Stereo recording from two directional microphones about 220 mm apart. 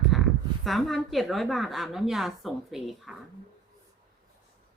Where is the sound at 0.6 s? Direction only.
Centre (ahead or behind).